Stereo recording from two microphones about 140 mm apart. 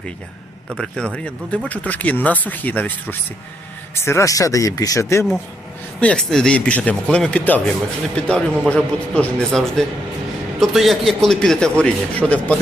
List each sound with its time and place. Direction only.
0.8 s speech: 5° left (ahead or behind); by 5.2 s 20° left (ahead or behind)
6.0 s a man's voice: 5° left (ahead or behind)